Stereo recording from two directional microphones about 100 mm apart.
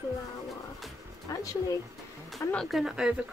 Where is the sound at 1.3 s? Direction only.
35° left (ahead or behind).